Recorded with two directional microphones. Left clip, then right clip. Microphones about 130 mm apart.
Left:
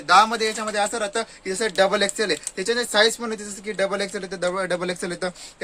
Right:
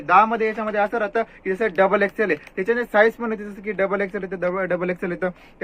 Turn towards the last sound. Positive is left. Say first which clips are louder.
# right 2 dB
turn(degrees=60)  # may be behind; listen again after turning